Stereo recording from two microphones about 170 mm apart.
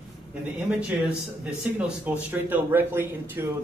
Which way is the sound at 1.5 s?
10° right (ahead or behind).